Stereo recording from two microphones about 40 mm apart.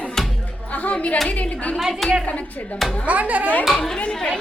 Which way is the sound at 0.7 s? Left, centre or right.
Left.